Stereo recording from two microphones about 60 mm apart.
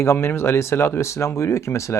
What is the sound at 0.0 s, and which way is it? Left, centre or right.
Speech, left.